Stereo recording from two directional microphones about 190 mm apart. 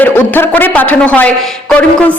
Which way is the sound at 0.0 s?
10° left (ahead or behind).